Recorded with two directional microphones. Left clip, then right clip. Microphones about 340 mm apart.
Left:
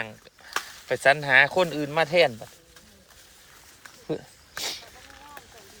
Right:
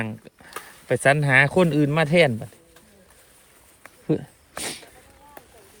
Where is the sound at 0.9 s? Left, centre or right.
Right.